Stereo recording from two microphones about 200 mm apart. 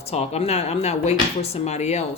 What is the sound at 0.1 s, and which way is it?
Speech, 30° left (ahead or behind).